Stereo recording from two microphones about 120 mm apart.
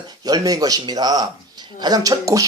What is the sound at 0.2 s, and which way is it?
Speech, 30° right (ahead or behind).